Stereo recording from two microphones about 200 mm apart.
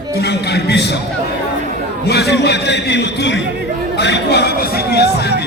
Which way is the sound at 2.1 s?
55° left (ahead or behind).